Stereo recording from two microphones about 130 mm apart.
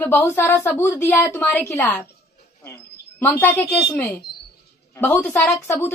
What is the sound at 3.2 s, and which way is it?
Speech, 15° left (ahead or behind).